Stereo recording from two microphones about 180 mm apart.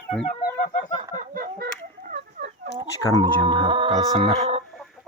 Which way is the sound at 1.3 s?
55° right (ahead or behind).